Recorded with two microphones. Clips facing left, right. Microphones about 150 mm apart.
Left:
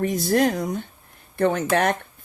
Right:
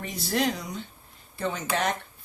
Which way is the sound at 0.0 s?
50° left (ahead or behind).